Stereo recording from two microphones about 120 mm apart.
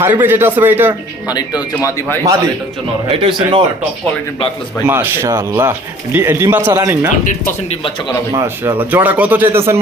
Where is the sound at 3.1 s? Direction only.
50° right (ahead or behind).